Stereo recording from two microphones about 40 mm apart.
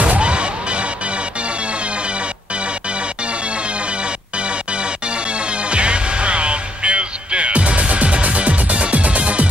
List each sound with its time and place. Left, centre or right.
0.0 s music: right
5.7 s music: right